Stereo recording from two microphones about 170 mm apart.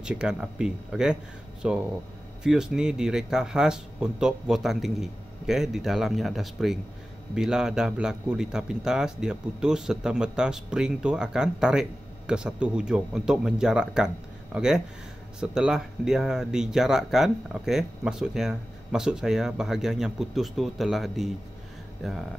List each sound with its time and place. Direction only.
0.0 s speech: 5° right (ahead or behind)